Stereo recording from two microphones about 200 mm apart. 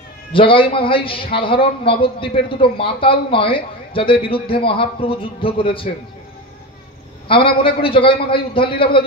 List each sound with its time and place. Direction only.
0.3 s a man's voice: 25° left (ahead or behind)
7.2 s a man's voice: 25° left (ahead or behind)